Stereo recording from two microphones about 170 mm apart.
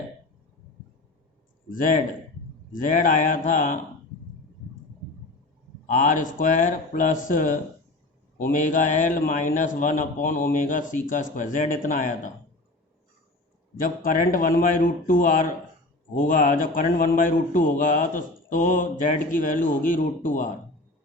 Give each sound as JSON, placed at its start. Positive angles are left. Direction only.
{"t": 2.7, "sound": "a man's voice", "side_deg": 50}
{"t": 5.8, "sound": "a man's voice", "side_deg": 45}
{"t": 13.8, "sound": "a man's voice", "side_deg": 55}